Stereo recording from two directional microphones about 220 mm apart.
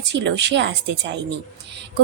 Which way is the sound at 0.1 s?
55° right (ahead or behind).